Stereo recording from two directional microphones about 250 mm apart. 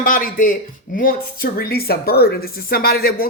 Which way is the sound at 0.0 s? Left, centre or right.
Left.